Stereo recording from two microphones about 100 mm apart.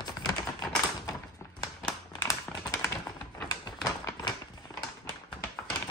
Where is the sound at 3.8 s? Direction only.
35° left (ahead or behind).